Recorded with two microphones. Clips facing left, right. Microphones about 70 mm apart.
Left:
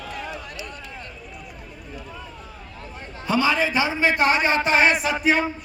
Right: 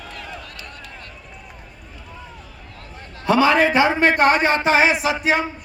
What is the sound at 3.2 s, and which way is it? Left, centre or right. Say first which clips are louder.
Speech: right 6 dB; right.